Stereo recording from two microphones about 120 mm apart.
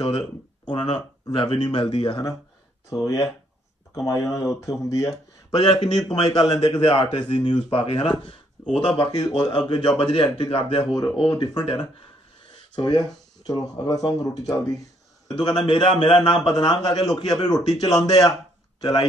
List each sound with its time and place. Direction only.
0.9 s speech: 35° left (ahead or behind)
2.9 s a man's voice: 30° left (ahead or behind); by 10.9 s 50° left (ahead or behind)
11.2 s speech: 35° left (ahead or behind)
11.6 s a man's voice: 45° left (ahead or behind)